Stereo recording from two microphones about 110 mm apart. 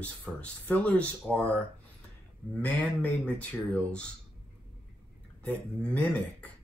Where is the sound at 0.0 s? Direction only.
10° left (ahead or behind).